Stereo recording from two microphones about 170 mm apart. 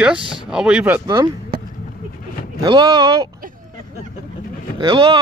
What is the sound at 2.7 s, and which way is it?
Speech, 20° right (ahead or behind).